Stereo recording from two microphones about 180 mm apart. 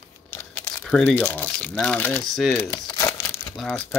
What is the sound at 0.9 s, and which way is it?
Speech, 5° left (ahead or behind).